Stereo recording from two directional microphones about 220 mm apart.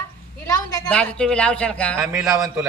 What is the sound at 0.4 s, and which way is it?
A woman's voice, 5° left (ahead or behind).